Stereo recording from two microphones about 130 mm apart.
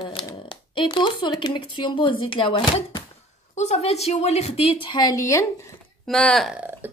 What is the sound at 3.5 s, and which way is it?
A woman's voice, 55° left (ahead or behind).